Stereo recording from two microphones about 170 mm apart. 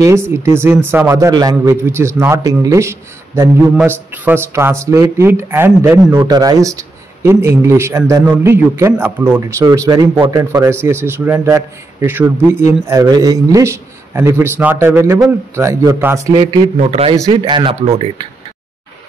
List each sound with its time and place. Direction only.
0.0 s a man's voice: 15° right (ahead or behind)
16.3 s a man's voice: 30° right (ahead or behind)